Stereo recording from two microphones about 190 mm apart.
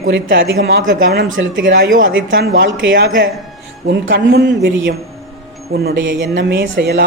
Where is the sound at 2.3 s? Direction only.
55° right (ahead or behind).